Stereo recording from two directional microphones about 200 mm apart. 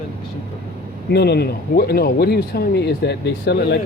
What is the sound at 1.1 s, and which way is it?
Speech, 55° left (ahead or behind).